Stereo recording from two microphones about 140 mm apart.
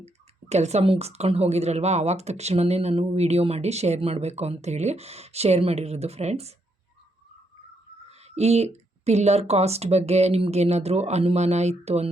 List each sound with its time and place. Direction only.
0.0 s speech: 50° right (ahead or behind)
8.1 s speech: 50° right (ahead or behind)